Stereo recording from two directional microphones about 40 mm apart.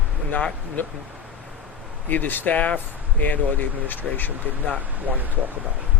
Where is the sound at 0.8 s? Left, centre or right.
Left.